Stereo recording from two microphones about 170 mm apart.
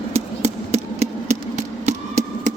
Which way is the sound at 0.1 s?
40° right (ahead or behind).